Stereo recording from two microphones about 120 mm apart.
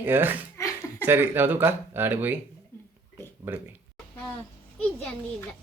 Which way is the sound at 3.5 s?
15° right (ahead or behind).